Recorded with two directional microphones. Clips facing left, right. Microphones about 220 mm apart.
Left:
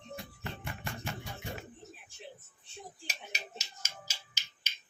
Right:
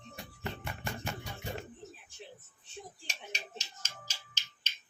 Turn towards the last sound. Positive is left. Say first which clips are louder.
# even
turn(degrees=10)  # may be behind; listen again after turning